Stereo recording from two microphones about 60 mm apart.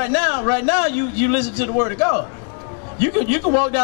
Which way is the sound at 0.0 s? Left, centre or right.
Centre.